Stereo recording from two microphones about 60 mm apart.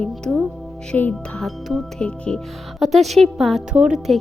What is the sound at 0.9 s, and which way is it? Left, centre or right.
Speech, centre.